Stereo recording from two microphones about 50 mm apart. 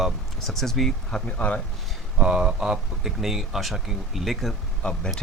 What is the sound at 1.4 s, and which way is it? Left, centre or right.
Speech, left.